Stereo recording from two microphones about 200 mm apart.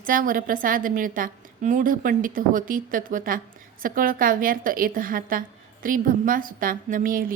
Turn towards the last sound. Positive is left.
turn(degrees=-45)  # may be behind; listen again after turning